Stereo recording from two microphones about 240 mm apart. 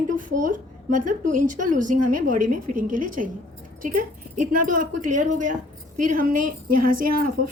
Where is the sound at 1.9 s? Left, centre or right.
Right.